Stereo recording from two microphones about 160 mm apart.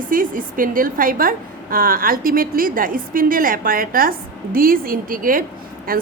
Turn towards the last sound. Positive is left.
turn(degrees=-65)  # may be behind; listen again after turning